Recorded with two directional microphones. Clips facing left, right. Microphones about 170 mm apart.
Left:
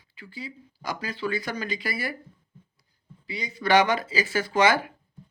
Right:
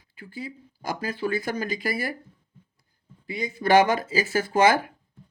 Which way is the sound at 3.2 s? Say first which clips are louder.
Right 2 dB; 50° right (ahead or behind).